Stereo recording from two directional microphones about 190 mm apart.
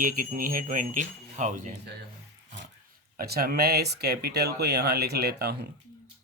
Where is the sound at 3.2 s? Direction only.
55° right (ahead or behind).